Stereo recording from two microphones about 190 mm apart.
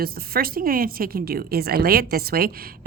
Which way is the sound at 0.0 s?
50° right (ahead or behind).